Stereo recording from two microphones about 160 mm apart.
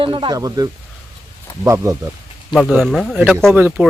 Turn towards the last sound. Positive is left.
turn(degrees=-15)  # may be behind; listen again after turning